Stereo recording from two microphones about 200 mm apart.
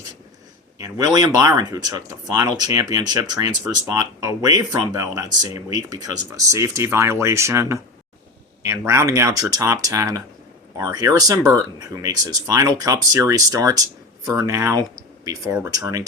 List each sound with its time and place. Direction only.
0.8 s speech: 20° right (ahead or behind)